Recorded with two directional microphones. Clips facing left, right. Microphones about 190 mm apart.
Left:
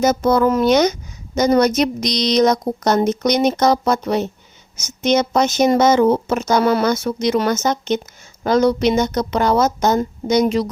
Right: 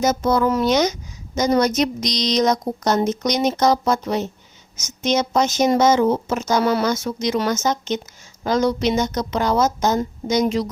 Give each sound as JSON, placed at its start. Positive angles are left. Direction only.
{"t": 0.0, "sound": "speech", "side_deg": 55}